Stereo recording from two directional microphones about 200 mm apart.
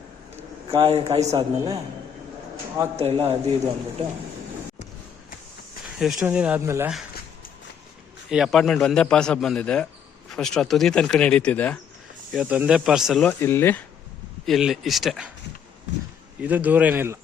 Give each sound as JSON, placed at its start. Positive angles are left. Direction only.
{"t": 0.7, "sound": "a man's voice", "side_deg": -30}
{"t": 1.3, "sound": "speech", "side_deg": -15}
{"t": 2.9, "sound": "speech", "side_deg": -30}
{"t": 6.0, "sound": "speech", "side_deg": 0}
{"t": 8.3, "sound": "a man's voice", "side_deg": 0}
{"t": 12.3, "sound": "a man's voice", "side_deg": -5}
{"t": 14.4, "sound": "a man's voice", "side_deg": 0}
{"t": 16.4, "sound": "speech", "side_deg": -10}